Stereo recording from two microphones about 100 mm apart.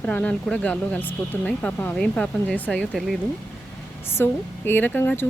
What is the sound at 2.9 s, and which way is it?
Speech, centre (ahead or behind).